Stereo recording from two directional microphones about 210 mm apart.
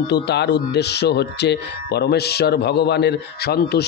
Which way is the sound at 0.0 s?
55° left (ahead or behind).